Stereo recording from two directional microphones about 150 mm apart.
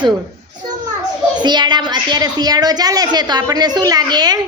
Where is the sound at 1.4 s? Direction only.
30° right (ahead or behind).